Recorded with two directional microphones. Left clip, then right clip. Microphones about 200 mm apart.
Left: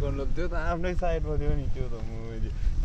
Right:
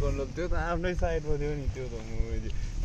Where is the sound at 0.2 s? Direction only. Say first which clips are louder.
Even; 20° left (ahead or behind).